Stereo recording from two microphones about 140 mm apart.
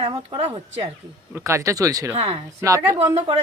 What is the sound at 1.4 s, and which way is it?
Speech, 20° right (ahead or behind).